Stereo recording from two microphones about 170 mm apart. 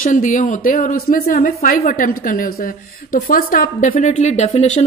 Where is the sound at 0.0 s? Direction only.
50° left (ahead or behind).